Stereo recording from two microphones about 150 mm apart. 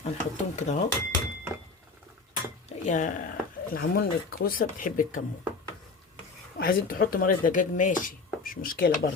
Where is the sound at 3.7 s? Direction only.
80° left.